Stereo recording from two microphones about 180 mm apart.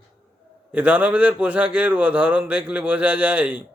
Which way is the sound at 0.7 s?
10° right (ahead or behind).